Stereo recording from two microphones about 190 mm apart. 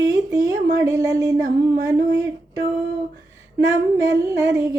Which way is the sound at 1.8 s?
20° right (ahead or behind).